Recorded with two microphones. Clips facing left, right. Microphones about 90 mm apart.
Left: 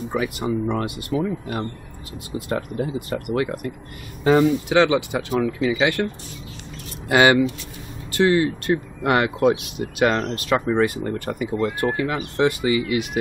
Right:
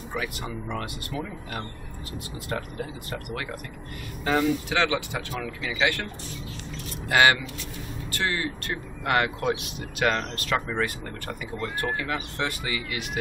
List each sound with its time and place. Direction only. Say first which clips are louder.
0.1 s speech: left 8 dB; 20° left (ahead or behind)
2.3 s speech: left 10 dB; 30° left (ahead or behind)
3.1 s speech: left 10 dB; 20° left (ahead or behind)
7.1 s speech: left 5 dB; 20° left (ahead or behind)